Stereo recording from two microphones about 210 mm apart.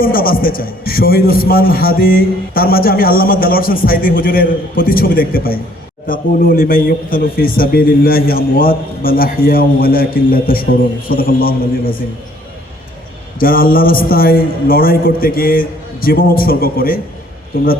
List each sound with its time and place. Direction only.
0.0 s a man's voice: 45° left (ahead or behind)
13.4 s a man's voice: 45° left (ahead or behind)